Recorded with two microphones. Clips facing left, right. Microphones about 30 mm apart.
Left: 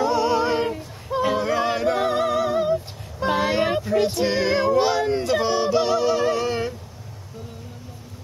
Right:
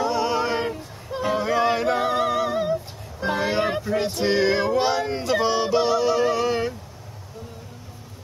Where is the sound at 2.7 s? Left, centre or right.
Centre.